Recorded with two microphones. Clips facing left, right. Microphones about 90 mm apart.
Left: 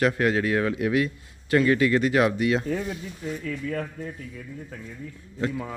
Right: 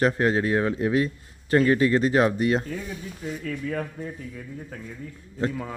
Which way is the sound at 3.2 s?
5° right (ahead or behind).